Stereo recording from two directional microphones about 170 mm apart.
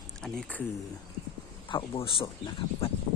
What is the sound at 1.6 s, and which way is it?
Speech, 30° left (ahead or behind).